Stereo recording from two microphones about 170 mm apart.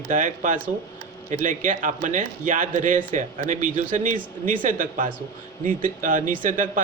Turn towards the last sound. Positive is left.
turn(degrees=-50)  # may be behind; listen again after turning